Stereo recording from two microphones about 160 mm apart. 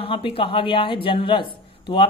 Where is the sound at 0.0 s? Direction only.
35° left (ahead or behind).